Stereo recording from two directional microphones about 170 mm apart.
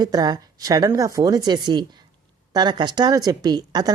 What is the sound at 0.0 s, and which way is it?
A woman's voice, 25° right (ahead or behind).